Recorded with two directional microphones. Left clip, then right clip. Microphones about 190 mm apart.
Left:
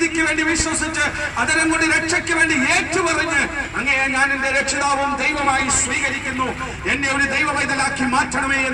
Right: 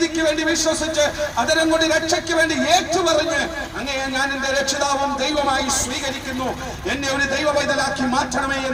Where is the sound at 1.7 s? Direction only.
30° right (ahead or behind).